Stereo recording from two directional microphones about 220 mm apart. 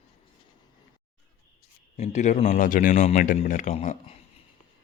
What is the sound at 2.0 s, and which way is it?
Speech, 30° left (ahead or behind).